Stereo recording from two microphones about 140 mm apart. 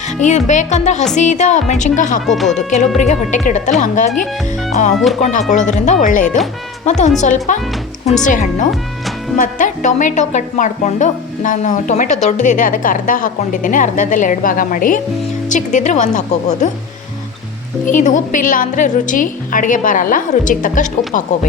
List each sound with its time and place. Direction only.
0.2 s a woman's voice: 60° left (ahead or behind)
2.2 s speech: centre (ahead or behind)
3.0 s a woman's voice: 60° left (ahead or behind)
6.8 s a woman's voice: 55° left (ahead or behind); by 15.0 s 75° left (ahead or behind)
15.4 s a woman's voice: 60° left (ahead or behind)
17.8 s speech: 65° left (ahead or behind)